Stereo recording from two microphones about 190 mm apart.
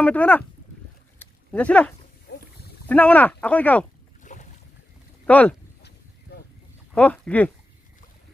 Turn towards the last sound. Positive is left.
turn(degrees=5)  # may be behind; listen again after turning